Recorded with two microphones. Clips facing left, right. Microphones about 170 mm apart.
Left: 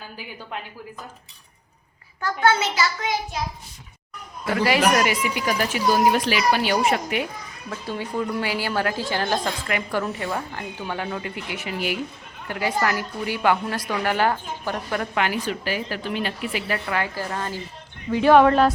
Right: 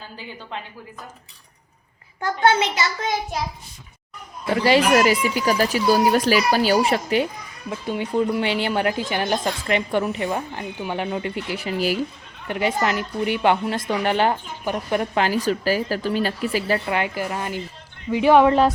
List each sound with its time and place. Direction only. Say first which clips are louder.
4.4 s speech: right 2 dB; 30° right (ahead or behind)
7.7 s a woman's voice: right 4 dB; 20° right (ahead or behind); by 11.9 s 35° right (ahead or behind)
12.5 s a woman's voice: right 2 dB; 25° right (ahead or behind)